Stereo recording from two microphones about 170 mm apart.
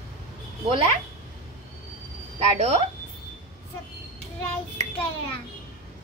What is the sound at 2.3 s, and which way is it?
Speech, 35° right (ahead or behind).